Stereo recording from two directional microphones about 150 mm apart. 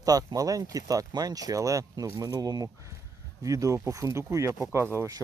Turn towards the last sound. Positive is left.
turn(degrees=-20)  # may be behind; listen again after turning